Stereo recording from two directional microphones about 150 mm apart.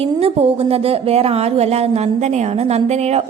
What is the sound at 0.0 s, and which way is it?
A woman's voice, 40° right (ahead or behind).